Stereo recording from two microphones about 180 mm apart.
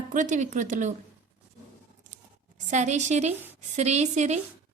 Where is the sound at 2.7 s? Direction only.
40° right (ahead or behind).